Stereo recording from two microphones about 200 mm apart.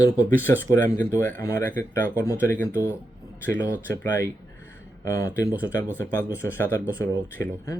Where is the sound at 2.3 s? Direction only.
10° left (ahead or behind).